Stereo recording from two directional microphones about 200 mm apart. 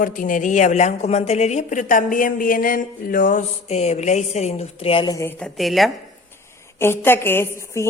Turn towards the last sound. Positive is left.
turn(degrees=15)  # may be behind; listen again after turning